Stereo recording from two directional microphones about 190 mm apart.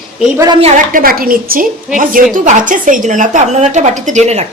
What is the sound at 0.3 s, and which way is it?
Speech, 20° right (ahead or behind).